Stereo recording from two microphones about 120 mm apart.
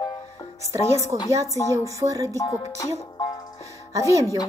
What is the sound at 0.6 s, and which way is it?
A woman's voice, 25° right (ahead or behind).